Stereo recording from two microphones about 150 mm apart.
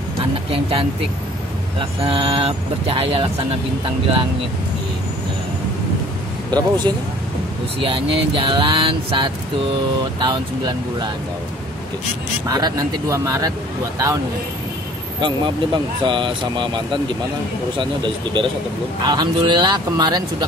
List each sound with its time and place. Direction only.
0.5 s speech: 40° right (ahead or behind)
6.5 s speech: 30° right (ahead or behind)
7.8 s speech: 35° right (ahead or behind)
12.4 s speech: 25° right (ahead or behind)
15.1 s speech: 30° right (ahead or behind)